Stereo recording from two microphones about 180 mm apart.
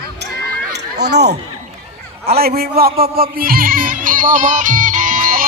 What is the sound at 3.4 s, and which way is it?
Music, 50° right (ahead or behind).